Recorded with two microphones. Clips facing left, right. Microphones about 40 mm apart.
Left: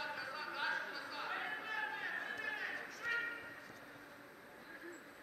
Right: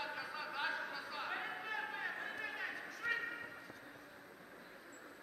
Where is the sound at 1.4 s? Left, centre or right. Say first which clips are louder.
Left 1 dB; centre.